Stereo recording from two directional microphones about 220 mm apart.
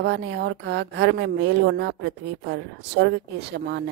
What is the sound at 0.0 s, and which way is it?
A woman's voice, 55° right (ahead or behind).